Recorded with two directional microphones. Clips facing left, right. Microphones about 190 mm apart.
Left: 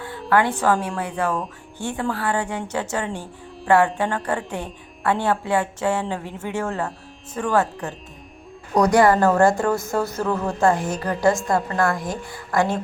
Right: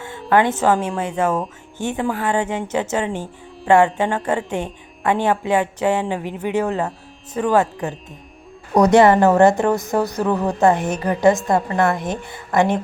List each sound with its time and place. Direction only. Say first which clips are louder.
0.3 s a woman's voice: right 3 dB; 20° right (ahead or behind)